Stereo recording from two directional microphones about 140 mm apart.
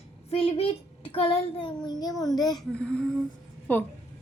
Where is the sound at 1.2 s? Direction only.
40° left (ahead or behind).